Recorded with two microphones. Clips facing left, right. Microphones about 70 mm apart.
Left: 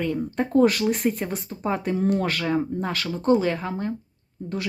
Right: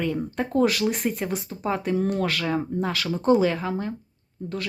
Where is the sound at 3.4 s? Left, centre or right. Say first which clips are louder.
Right 1 dB; centre.